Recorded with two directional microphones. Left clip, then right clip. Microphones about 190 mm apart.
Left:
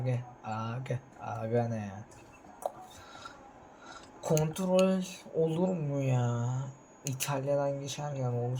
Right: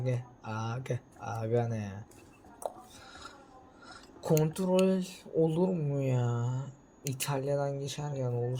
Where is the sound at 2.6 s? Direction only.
60° right (ahead or behind).